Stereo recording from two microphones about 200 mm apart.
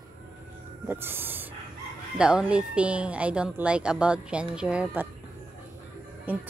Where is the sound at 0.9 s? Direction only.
10° right (ahead or behind).